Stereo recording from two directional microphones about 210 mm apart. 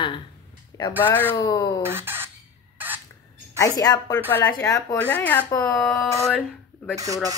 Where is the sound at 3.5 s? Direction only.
15° left (ahead or behind).